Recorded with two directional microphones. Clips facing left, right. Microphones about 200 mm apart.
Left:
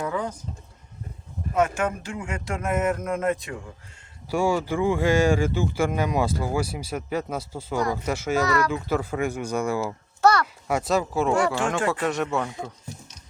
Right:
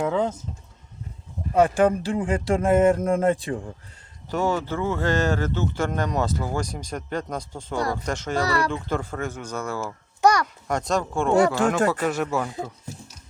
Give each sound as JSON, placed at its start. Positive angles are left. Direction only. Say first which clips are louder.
{"t": 0.0, "sound": "speech", "louder": "right 5 dB", "side_deg": -25}
{"t": 1.5, "sound": "speech", "louder": "right 5 dB", "side_deg": -35}
{"t": 4.3, "sound": "speech", "louder": "left 1 dB", "side_deg": 10}
{"t": 8.4, "sound": "speech", "louder": "left 1 dB", "side_deg": -30}
{"t": 8.7, "sound": "speech", "louder": "left 2 dB", "side_deg": 5}
{"t": 10.2, "sound": "a sound", "louder": "even", "side_deg": -15}
{"t": 10.4, "sound": "speech", "louder": "left 1 dB", "side_deg": 5}